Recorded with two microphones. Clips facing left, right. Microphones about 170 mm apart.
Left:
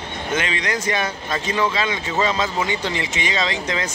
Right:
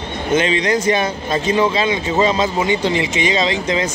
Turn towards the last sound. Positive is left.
turn(degrees=-20)  # may be behind; listen again after turning